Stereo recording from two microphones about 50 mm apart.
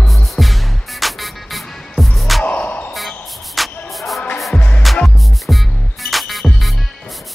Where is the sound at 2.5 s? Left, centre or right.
Left.